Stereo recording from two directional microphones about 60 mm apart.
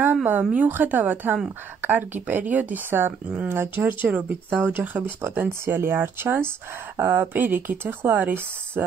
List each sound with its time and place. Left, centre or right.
0.0 s a woman's voice: right